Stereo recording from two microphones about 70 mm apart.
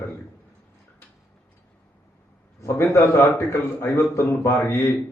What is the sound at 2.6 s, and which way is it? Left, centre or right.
A man's voice, left.